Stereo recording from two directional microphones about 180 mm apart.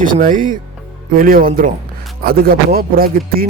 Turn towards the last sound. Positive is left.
turn(degrees=-55)  # may be behind; listen again after turning